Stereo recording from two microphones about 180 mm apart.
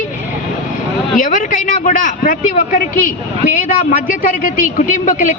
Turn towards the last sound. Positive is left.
turn(degrees=45)  # may be behind; listen again after turning